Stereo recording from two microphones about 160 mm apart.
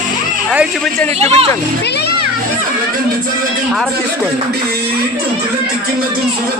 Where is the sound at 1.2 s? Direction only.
40° right (ahead or behind).